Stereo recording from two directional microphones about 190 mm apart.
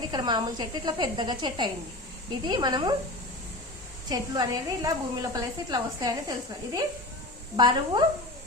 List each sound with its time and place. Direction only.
0.0 s a woman's voice: 25° right (ahead or behind)
4.1 s a woman's voice: 20° right (ahead or behind)
7.5 s a woman's voice: 25° right (ahead or behind)